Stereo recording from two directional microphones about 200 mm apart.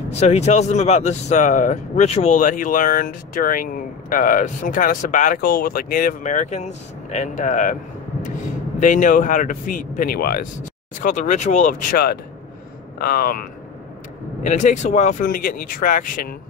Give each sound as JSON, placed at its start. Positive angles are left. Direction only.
{"t": 0.2, "sound": "speech", "side_deg": 35}
{"t": 8.7, "sound": "speech", "side_deg": 40}